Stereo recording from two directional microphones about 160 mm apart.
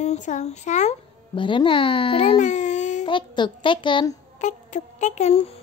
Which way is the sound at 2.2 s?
45° left (ahead or behind).